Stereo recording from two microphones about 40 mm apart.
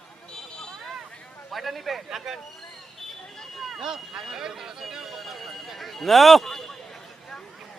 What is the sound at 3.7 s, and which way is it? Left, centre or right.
Speech, centre.